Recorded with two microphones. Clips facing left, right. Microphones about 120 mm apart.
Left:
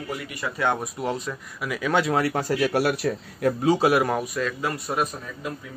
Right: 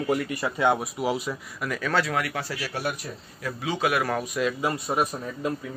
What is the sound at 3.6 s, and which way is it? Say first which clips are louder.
Speech: left 5 dB; 35° left (ahead or behind).